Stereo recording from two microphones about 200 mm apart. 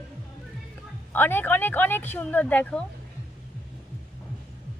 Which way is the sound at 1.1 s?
10° left (ahead or behind).